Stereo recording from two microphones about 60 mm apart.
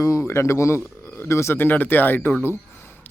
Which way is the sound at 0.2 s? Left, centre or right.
Left.